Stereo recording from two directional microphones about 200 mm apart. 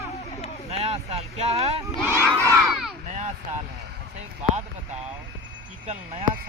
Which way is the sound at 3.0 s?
35° right (ahead or behind).